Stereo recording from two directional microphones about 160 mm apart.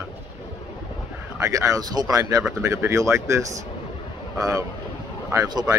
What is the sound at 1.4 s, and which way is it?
Speech, 20° right (ahead or behind).